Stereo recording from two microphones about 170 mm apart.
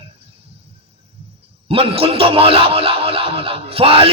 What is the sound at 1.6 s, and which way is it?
A man's voice, 35° right (ahead or behind).